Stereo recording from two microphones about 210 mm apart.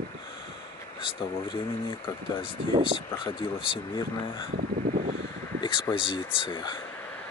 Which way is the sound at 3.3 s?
25° left (ahead or behind).